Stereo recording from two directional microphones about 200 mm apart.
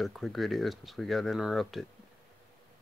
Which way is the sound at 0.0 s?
Centre (ahead or behind).